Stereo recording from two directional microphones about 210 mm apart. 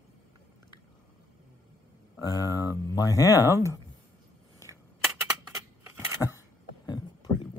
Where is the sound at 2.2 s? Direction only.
20° left (ahead or behind).